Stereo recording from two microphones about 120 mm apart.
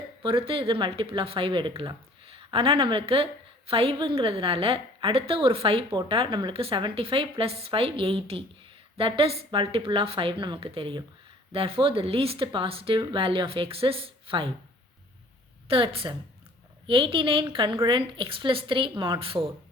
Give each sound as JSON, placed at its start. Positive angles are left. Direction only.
{"t": 0.2, "sound": "a woman's voice", "side_deg": -50}
{"t": 15.7, "sound": "a woman's voice", "side_deg": -50}